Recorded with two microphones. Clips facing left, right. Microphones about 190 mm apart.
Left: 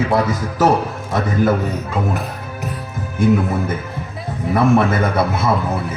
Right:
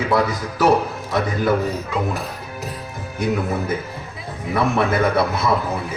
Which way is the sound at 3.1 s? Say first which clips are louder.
Left 6 dB; 50° left (ahead or behind).